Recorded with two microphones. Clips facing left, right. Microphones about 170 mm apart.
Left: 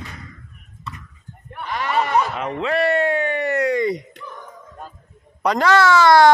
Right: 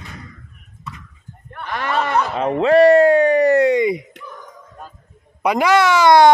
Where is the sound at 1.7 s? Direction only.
55° right (ahead or behind).